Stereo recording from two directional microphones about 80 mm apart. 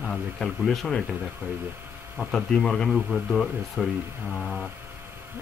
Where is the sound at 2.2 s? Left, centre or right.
Centre.